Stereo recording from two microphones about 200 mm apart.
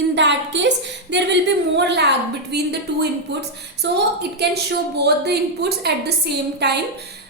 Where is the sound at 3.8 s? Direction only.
60° right (ahead or behind).